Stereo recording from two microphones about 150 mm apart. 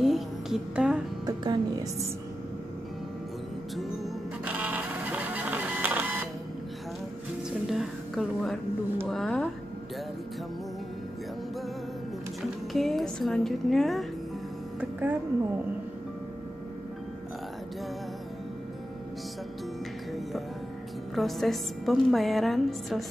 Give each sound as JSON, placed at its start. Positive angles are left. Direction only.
{"t": 0.0, "sound": "speech", "side_deg": 0}
{"t": 1.2, "sound": "speech", "side_deg": -30}
{"t": 3.7, "sound": "a woman's voice", "side_deg": 0}
{"t": 4.5, "sound": "printer", "side_deg": -10}
{"t": 7.7, "sound": "a sound", "side_deg": 0}
{"t": 12.4, "sound": "a woman's voice", "side_deg": 0}
{"t": 14.8, "sound": "music", "side_deg": -10}
{"t": 21.1, "sound": "a woman's voice", "side_deg": 0}